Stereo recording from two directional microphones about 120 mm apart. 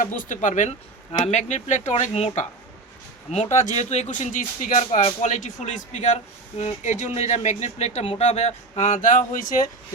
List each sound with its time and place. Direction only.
0.2 s speech: 90° left
1.2 s speech: 70° left (ahead or behind); by 6.1 s 90° left
6.6 s speech: 65° left (ahead or behind); by 9.6 s 90° left